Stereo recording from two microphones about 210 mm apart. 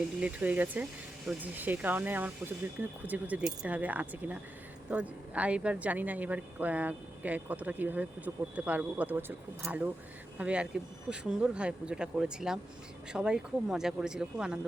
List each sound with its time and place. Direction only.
0.2 s speech: 5° right (ahead or behind)